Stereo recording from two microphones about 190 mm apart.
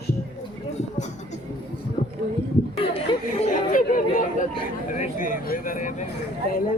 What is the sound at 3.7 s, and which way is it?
Speech, 45° left (ahead or behind).